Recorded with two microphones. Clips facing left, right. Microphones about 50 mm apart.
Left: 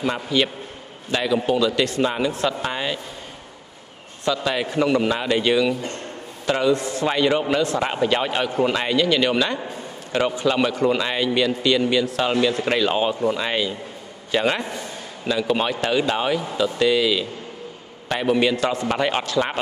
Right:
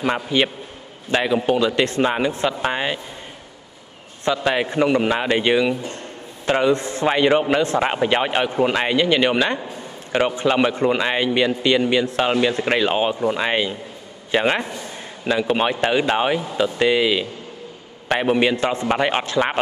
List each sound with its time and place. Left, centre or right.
0.0 s a man's voice: right
4.2 s a man's voice: right